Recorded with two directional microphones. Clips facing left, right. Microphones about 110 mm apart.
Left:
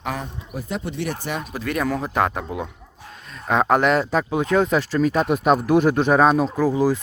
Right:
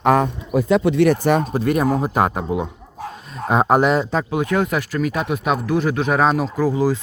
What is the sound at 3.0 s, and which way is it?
Dog, 40° right (ahead or behind).